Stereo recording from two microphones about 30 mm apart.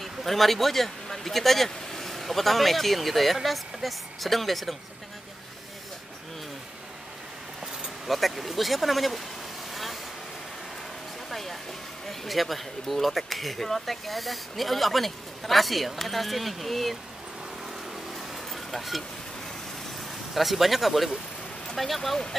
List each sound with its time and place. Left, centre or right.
0.0 s speech: centre
8.1 s speech: centre
9.7 s waves: centre
11.2 s a sound: centre
12.1 s speech: centre
18.1 s vehicle: centre
20.3 s speech: centre